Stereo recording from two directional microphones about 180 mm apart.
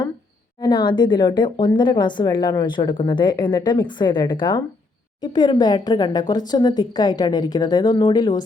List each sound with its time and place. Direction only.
0.6 s speech: 25° left (ahead or behind)